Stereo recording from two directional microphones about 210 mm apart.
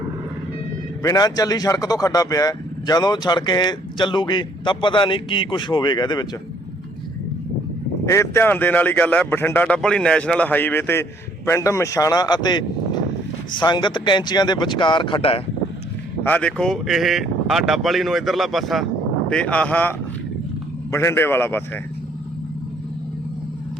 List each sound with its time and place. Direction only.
1.0 s speech: 15° left (ahead or behind)
8.0 s speech: 15° left (ahead or behind)
16.2 s speech: 5° left (ahead or behind)